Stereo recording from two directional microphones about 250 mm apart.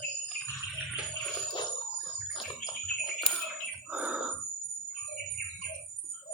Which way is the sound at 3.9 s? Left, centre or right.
Centre.